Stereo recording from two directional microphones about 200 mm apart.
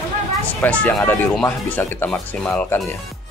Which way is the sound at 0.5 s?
5° left (ahead or behind).